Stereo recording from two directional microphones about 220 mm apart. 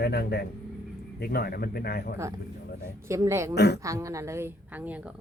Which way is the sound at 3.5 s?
50° left (ahead or behind).